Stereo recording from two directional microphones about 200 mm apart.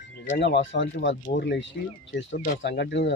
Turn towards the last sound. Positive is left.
turn(degrees=60)  # may be behind; listen again after turning